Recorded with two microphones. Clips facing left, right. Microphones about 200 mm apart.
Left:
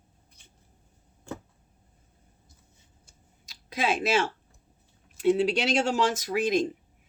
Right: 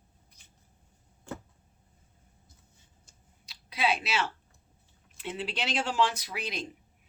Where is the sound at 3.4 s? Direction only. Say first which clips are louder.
Left 1 dB; 45° left (ahead or behind).